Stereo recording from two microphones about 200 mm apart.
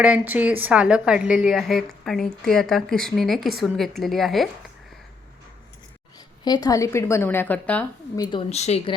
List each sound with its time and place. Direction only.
0.0 s speech: 5° right (ahead or behind)
6.4 s a woman's voice: 20° left (ahead or behind)
8.1 s speech: 20° left (ahead or behind)